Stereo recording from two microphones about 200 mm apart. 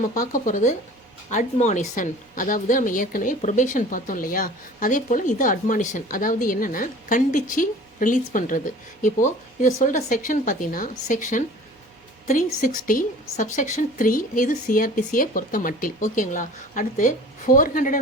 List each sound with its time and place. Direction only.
0.2 s a woman's voice: 40° left (ahead or behind)
12.6 s a woman's voice: 40° left (ahead or behind)